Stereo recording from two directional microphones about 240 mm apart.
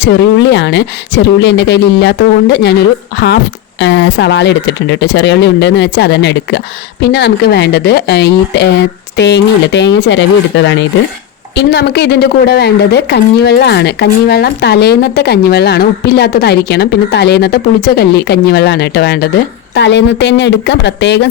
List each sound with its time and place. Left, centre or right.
0.0 s a woman's voice: left
3.8 s a woman's voice: left